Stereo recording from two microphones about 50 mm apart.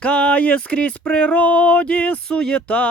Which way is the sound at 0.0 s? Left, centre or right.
Left.